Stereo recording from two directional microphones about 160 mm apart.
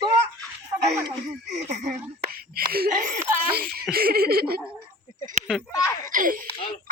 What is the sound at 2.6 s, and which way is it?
Giggle, 70° right (ahead or behind).